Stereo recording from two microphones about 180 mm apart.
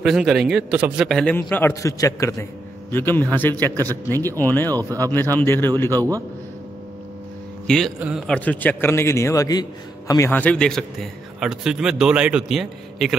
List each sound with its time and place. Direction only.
0.0 s a man's voice: centre (ahead or behind)
3.7 s a man's voice: 20° right (ahead or behind)
4.4 s a man's voice: 10° left (ahead or behind)
7.6 s a man's voice: 5° left (ahead or behind)